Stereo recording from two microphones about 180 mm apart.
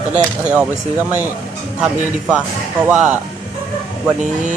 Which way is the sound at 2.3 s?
5° right (ahead or behind).